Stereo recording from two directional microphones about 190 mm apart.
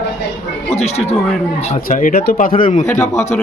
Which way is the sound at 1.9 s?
45° left (ahead or behind).